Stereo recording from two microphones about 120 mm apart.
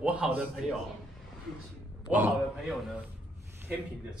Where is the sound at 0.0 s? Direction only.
10° right (ahead or behind).